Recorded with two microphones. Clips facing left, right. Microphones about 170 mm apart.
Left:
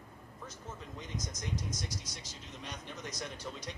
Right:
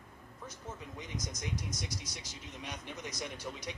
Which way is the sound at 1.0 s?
10° right (ahead or behind).